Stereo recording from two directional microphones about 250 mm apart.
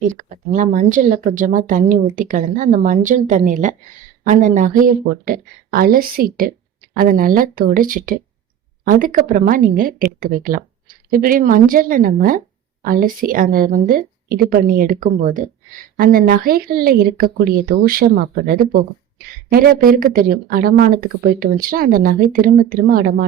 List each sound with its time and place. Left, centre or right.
0.0 s speech: right